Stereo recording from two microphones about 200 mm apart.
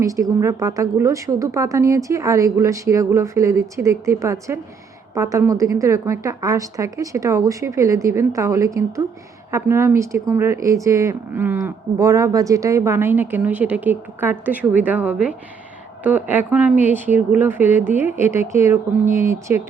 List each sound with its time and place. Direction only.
0.0 s speech: 15° right (ahead or behind)